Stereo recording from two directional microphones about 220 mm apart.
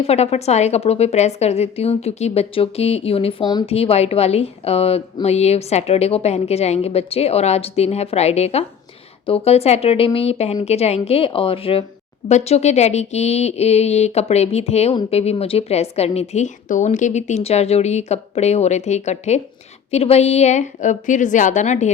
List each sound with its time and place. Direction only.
0.0 s a woman's voice: 30° left (ahead or behind)